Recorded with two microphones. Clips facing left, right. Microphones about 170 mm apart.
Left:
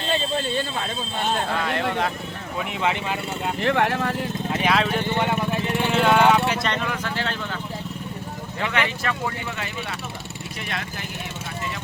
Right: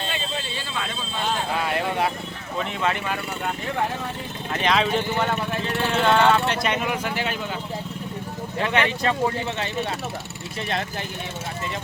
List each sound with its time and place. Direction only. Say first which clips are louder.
0.1 s a sound: left 6 dB; 45° left (ahead or behind)
1.6 s speech: even; 10° right (ahead or behind)
2.6 s speech: even; 15° left (ahead or behind)
3.6 s speech: left 9 dB; 80° left
4.5 s speech: right 1 dB; 5° left (ahead or behind)
6.7 s speech: right 2 dB; 10° right (ahead or behind)
8.5 s speech: right 3 dB; 20° right (ahead or behind)